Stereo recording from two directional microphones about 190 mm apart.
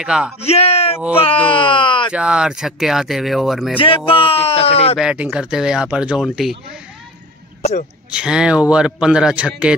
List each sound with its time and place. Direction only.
0.0 s a man's voice: 5° right (ahead or behind)
0.4 s speech: 30° left (ahead or behind)
2.1 s a man's voice: 5° right (ahead or behind)
3.7 s speech: 30° left (ahead or behind)
4.9 s a man's voice: 5° right (ahead or behind)
8.1 s a man's voice: 5° right (ahead or behind)